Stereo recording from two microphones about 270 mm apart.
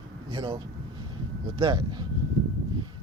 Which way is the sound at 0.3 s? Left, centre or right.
Centre.